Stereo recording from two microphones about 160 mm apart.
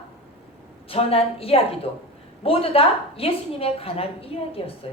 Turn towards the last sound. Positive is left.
turn(degrees=35)  # may be behind; listen again after turning